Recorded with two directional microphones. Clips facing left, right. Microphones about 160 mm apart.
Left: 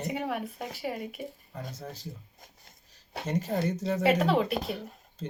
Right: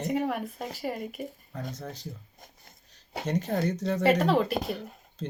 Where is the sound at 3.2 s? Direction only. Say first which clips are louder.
Right 1 dB; 5° left (ahead or behind).